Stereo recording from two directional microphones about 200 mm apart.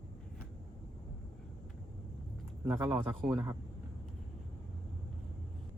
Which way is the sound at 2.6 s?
15° right (ahead or behind).